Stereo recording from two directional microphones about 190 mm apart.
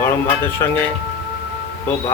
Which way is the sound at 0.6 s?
20° left (ahead or behind).